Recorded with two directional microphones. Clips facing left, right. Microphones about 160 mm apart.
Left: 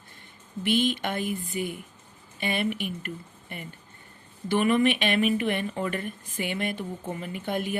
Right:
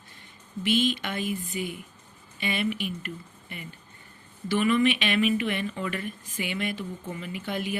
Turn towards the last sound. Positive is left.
turn(degrees=50)  # may be behind; listen again after turning